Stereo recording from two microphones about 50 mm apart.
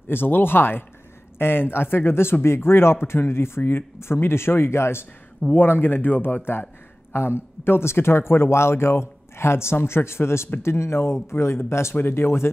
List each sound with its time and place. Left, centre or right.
0.1 s a man's voice: left
5.5 s a man's voice: left
11.9 s a man's voice: left